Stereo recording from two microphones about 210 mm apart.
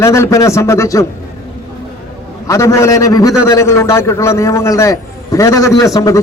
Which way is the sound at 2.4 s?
15° left (ahead or behind).